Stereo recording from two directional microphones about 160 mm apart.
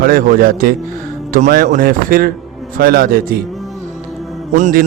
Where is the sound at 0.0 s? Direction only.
65° right (ahead or behind).